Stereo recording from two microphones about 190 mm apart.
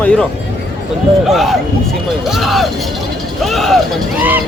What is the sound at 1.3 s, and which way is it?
Speech, centre (ahead or behind).